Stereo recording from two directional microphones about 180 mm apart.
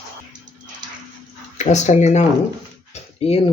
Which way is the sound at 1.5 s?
40° left (ahead or behind).